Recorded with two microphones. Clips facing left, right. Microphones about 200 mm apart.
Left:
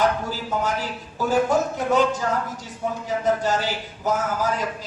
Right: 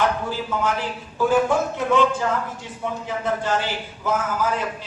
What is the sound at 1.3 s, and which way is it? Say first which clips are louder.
Speech: even; 40° left (ahead or behind).